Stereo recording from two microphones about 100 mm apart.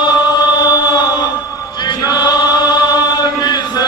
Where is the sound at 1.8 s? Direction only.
45° left (ahead or behind).